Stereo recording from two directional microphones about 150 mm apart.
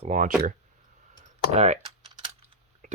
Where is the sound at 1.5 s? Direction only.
50° right (ahead or behind).